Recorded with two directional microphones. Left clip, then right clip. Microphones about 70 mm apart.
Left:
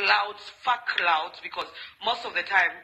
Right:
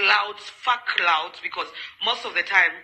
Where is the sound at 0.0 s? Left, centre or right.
Right.